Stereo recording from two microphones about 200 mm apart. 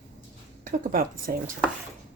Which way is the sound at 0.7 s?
45° right (ahead or behind).